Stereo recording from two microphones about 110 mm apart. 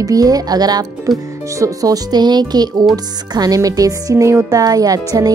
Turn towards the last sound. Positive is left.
turn(degrees=-30)  # may be behind; listen again after turning